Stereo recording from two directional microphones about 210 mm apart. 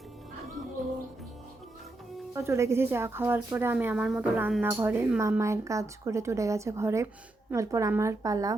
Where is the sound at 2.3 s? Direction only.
15° right (ahead or behind).